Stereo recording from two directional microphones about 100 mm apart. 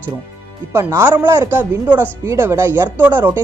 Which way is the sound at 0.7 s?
25° right (ahead or behind).